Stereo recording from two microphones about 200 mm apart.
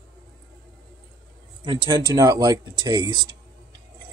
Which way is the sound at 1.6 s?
25° right (ahead or behind).